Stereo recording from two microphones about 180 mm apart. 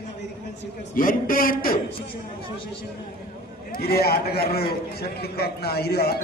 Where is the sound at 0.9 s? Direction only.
50° left (ahead or behind).